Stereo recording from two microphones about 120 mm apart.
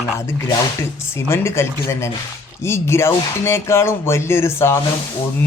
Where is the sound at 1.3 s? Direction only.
20° left (ahead or behind).